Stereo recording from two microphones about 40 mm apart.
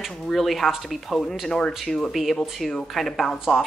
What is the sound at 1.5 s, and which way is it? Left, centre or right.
Speech, centre.